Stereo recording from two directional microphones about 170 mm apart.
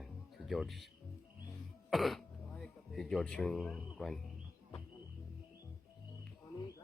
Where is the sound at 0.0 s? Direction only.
Centre (ahead or behind).